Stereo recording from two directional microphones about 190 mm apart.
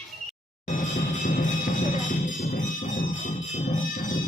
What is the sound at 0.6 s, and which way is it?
Music, 40° left (ahead or behind).